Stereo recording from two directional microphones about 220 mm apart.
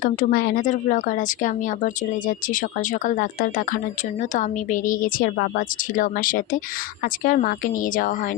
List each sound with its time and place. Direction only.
0.0 s speech: 40° left (ahead or behind)